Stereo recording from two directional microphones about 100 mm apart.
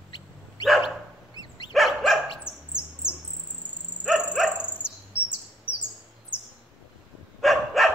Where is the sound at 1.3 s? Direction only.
45° left (ahead or behind).